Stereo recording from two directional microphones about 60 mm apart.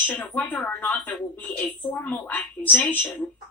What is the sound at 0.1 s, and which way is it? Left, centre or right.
Speech, left.